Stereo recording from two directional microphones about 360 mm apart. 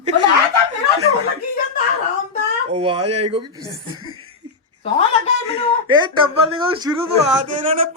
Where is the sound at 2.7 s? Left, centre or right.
Centre.